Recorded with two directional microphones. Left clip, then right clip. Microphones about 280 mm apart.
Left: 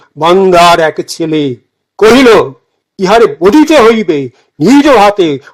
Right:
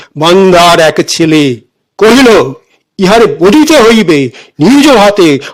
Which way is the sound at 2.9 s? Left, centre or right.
Right.